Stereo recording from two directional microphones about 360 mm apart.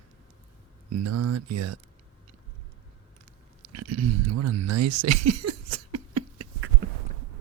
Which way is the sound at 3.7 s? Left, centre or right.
Right.